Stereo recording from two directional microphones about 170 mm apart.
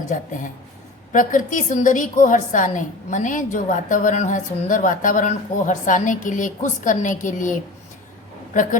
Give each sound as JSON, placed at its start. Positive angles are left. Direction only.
{"t": 1.1, "sound": "a woman's voice", "side_deg": 50}